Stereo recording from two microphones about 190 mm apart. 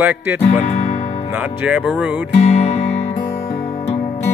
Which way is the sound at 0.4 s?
35° left (ahead or behind).